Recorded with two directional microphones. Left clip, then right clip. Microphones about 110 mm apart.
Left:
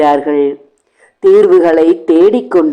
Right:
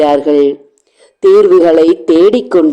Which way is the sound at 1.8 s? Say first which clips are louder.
Right 1 dB; 25° right (ahead or behind).